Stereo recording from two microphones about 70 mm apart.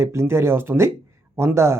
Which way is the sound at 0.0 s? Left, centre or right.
Right.